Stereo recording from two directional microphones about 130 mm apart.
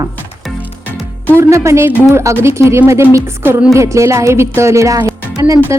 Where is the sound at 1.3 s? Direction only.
25° right (ahead or behind).